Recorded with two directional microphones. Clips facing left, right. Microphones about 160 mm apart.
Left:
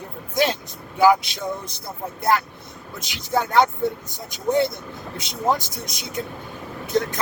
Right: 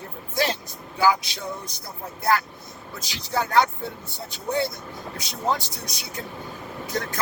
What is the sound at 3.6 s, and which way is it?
Speech, 20° left (ahead or behind).